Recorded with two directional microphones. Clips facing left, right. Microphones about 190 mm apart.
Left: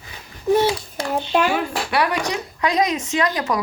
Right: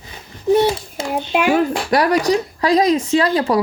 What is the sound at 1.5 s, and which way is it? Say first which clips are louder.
A child's voice: right 7 dB; 40° right (ahead or behind).